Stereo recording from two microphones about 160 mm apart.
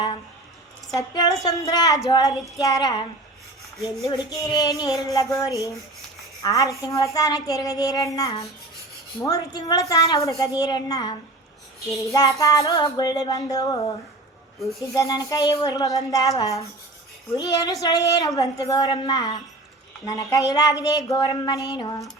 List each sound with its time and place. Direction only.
0.9 s child singing: 25° left (ahead or behind)
4.1 s child singing: 25° left (ahead or behind)
14.8 s child singing: 20° left (ahead or behind)